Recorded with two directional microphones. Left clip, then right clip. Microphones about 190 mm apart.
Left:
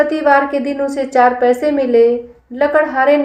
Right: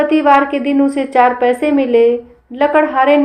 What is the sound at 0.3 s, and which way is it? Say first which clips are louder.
A woman's voice: right 1 dB; 25° right (ahead or behind).